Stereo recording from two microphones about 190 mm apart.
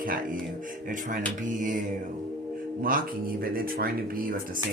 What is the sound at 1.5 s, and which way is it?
Speech, 40° right (ahead or behind).